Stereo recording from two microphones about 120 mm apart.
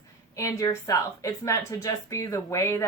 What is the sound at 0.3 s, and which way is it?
A woman's voice, 25° left (ahead or behind).